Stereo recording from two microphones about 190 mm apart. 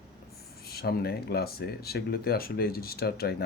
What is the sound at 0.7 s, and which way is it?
Speech, 55° left (ahead or behind).